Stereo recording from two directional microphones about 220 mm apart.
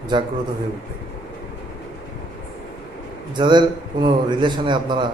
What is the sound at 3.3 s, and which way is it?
A man's voice, 20° right (ahead or behind).